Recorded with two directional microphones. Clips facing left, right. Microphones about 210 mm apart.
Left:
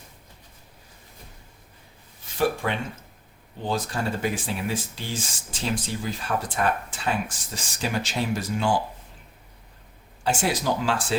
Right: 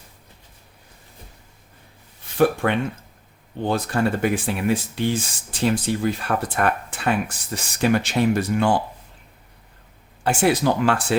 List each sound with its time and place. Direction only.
2.4 s speech: 60° right (ahead or behind)
10.2 s speech: 60° right (ahead or behind)